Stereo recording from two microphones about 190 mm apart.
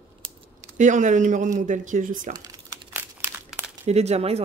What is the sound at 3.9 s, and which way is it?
Speech, 35° right (ahead or behind).